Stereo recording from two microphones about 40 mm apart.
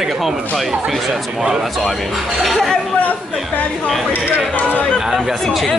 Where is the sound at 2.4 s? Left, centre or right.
Centre.